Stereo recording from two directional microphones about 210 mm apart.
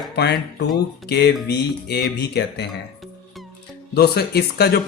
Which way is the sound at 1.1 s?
55° left (ahead or behind).